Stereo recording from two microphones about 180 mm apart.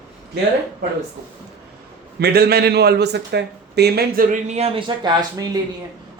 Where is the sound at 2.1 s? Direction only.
60° right (ahead or behind).